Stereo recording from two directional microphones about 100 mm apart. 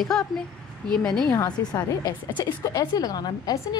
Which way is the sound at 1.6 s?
45° left (ahead or behind).